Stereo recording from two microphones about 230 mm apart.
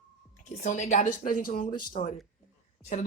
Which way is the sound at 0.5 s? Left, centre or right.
Left.